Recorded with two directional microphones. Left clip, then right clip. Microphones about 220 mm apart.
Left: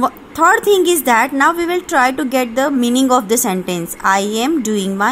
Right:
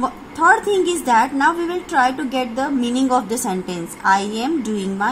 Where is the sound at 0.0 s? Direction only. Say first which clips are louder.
Left 3 dB; 35° left (ahead or behind).